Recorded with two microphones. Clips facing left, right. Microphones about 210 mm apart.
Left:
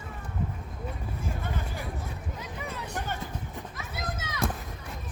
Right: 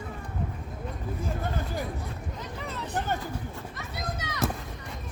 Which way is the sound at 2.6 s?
10° left (ahead or behind).